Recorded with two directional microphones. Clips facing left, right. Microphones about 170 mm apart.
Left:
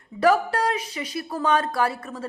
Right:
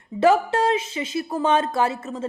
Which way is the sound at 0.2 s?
25° right (ahead or behind).